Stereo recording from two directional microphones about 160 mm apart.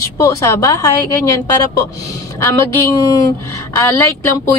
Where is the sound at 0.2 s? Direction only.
20° left (ahead or behind).